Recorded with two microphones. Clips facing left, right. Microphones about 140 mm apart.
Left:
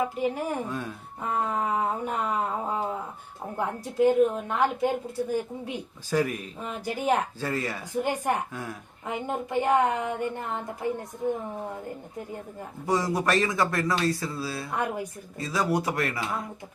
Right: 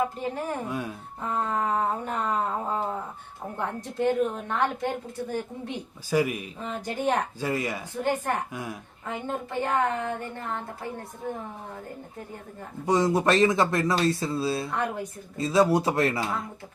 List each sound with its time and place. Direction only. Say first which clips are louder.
0.2 s speech: left 3 dB; 10° left (ahead or behind)
0.7 s speech: right 2 dB; 10° right (ahead or behind)
1.2 s speech: even; 10° left (ahead or behind)
6.1 s speech: right 1 dB; 10° right (ahead or behind)
6.7 s speech: left 1 dB; 5° left (ahead or behind)
7.4 s speech: right 2 dB; 15° right (ahead or behind)
8.0 s speech: right 2 dB; 15° left (ahead or behind)
12.8 s speech: right 3 dB; 25° right (ahead or behind)
14.7 s speech: even; 10° left (ahead or behind)
15.4 s speech: right 5 dB; 25° right (ahead or behind)